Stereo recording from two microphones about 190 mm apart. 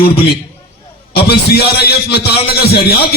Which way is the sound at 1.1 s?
60° left (ahead or behind).